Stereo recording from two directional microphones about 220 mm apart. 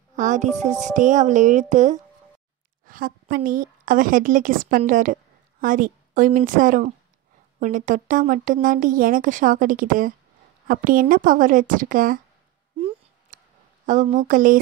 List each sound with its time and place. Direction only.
0.1 s a woman's voice: 35° right (ahead or behind)
12.7 s a sound: 25° right (ahead or behind)
13.8 s speech: 35° right (ahead or behind)